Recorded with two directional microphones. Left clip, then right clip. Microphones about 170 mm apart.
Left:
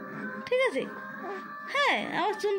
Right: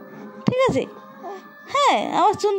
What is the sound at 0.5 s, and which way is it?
A child's voice, 45° right (ahead or behind).